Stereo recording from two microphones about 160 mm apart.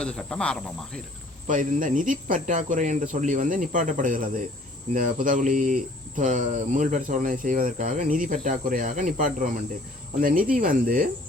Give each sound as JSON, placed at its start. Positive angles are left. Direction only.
{"t": 0.0, "sound": "cricket", "side_deg": 5}
{"t": 1.5, "sound": "speech", "side_deg": -55}